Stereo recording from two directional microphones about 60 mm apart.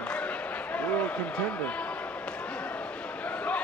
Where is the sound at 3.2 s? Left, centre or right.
Left.